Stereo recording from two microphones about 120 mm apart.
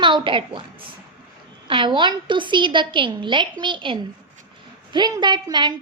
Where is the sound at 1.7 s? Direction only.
40° right (ahead or behind).